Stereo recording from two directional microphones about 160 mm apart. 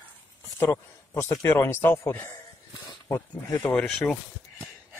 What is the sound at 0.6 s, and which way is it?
Speech, 20° left (ahead or behind).